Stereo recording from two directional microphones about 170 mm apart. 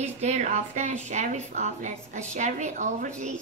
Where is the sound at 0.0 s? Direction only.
40° right (ahead or behind).